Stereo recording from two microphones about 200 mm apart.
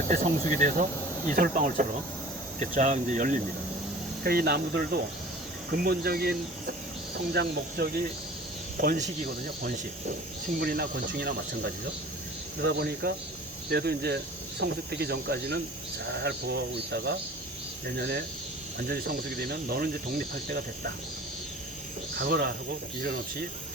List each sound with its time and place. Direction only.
0.1 s speech: 40° right (ahead or behind)
4.2 s cricket: 50° right (ahead or behind)
7.3 s speech: 55° right (ahead or behind)
8.8 s cricket: 45° right (ahead or behind)
12.5 s speech: 55° right (ahead or behind)
17.8 s cricket: 55° right (ahead or behind)
22.1 s speech: 50° right (ahead or behind)
23.0 s cricket: 50° right (ahead or behind)